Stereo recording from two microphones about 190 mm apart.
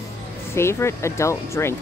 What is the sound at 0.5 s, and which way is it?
Speech, 15° left (ahead or behind).